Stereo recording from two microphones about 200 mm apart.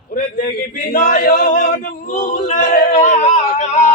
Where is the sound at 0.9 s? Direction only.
50° left (ahead or behind).